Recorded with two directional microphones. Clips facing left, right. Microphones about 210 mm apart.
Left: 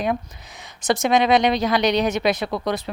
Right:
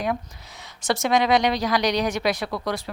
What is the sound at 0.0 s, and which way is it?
Speech, 20° left (ahead or behind).